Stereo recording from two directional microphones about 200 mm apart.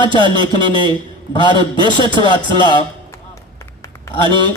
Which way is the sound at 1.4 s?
25° left (ahead or behind).